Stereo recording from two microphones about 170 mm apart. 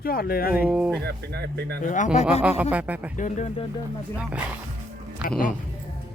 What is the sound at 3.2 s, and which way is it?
Speech, 45° left (ahead or behind).